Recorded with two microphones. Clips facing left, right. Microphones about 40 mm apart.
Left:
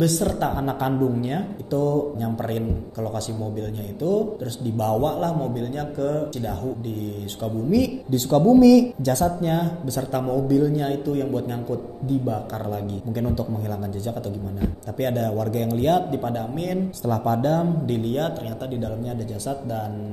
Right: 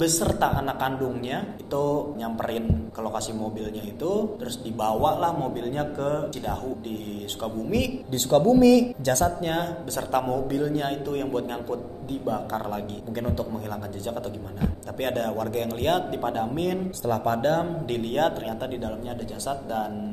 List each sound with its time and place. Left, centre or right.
0.3 s a man's voice: right
7.7 s a man's voice: right